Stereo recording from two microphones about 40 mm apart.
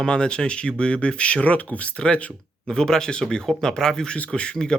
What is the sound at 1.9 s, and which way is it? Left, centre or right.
Speech, left.